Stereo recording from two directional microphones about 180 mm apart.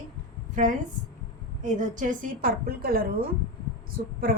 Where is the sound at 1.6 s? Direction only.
45° right (ahead or behind).